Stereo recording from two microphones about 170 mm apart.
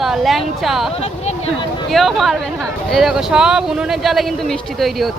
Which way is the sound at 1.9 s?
Centre (ahead or behind).